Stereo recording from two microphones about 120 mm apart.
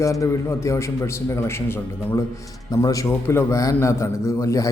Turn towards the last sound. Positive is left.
turn(degrees=25)  # may be behind; listen again after turning